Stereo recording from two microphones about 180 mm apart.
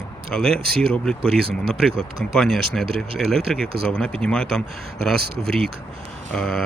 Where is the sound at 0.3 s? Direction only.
5° left (ahead or behind).